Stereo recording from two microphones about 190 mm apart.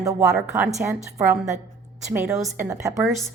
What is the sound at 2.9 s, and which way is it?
Speech, centre (ahead or behind).